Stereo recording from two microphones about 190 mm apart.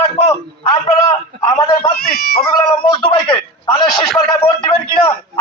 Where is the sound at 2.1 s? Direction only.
55° left (ahead or behind).